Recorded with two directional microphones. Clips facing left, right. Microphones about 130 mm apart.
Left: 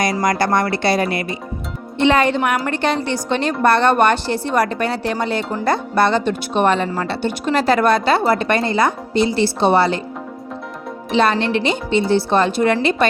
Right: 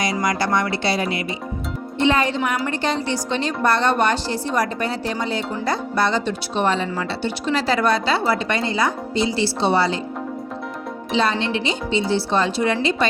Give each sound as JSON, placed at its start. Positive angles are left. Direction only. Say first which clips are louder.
{"t": 0.0, "sound": "a woman's voice", "louder": "left 4 dB", "side_deg": 50}
{"t": 2.0, "sound": "a woman's voice", "louder": "left 4 dB", "side_deg": 65}
{"t": 11.1, "sound": "a woman's voice", "louder": "left 4 dB", "side_deg": 60}